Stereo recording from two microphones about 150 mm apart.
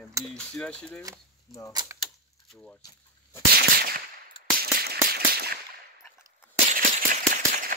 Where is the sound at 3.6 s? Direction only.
90° right.